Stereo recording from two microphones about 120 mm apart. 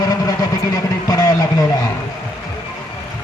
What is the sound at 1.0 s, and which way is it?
Speech, 30° left (ahead or behind).